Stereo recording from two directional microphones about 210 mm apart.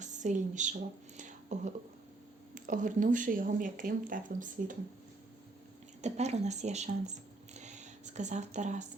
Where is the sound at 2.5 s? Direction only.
40° right (ahead or behind).